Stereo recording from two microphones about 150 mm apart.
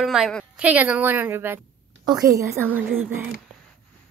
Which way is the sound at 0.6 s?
10° right (ahead or behind).